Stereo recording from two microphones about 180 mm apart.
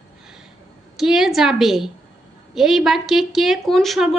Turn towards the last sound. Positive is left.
turn(degrees=0)  # may be behind; listen again after turning